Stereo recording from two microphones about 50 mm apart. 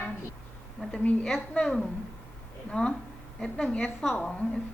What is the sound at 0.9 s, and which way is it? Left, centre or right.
A woman's voice, left.